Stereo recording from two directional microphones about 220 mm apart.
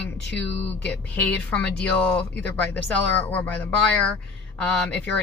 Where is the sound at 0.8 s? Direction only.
5° left (ahead or behind).